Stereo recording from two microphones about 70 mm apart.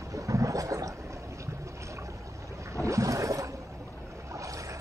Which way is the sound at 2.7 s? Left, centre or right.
Right.